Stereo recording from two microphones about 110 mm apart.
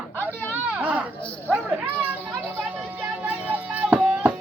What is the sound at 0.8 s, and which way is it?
Speech, 15° right (ahead or behind).